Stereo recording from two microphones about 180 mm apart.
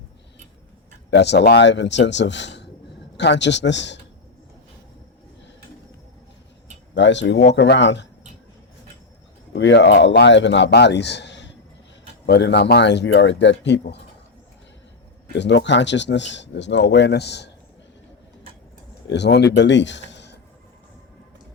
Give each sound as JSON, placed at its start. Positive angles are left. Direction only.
{"t": 1.1, "sound": "speech", "side_deg": 70}
{"t": 6.9, "sound": "speech", "side_deg": 80}
{"t": 9.5, "sound": "speech", "side_deg": 85}
{"t": 15.4, "sound": "speech", "side_deg": 75}
{"t": 19.0, "sound": "a man's voice", "side_deg": 75}